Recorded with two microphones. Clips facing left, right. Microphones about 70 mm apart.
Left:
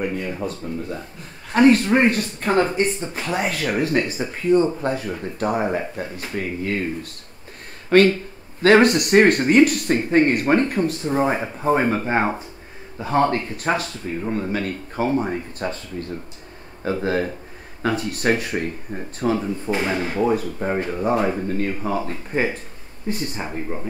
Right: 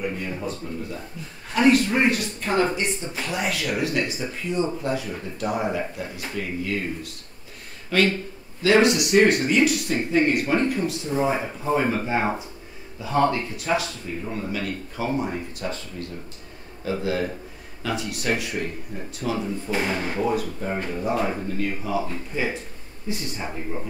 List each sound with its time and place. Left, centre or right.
0.0 s a man's voice: left
19.9 s speech: left
20.3 s a man's voice: left